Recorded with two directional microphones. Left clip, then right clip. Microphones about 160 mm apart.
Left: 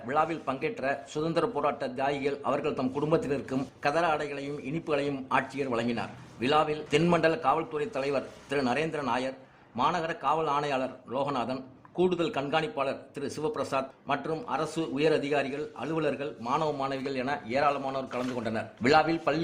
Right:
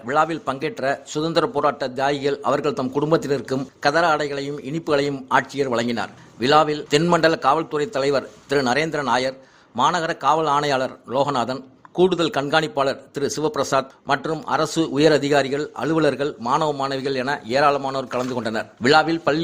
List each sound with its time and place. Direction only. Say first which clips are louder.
0.1 s a man's voice: right 8 dB; 30° right (ahead or behind)
18.8 s a man's voice: right 7 dB; 20° right (ahead or behind)